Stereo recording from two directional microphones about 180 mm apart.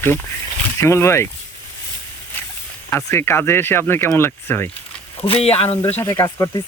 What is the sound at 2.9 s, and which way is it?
Speech, 15° left (ahead or behind).